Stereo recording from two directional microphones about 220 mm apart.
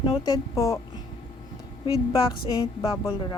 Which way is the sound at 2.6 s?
10° left (ahead or behind).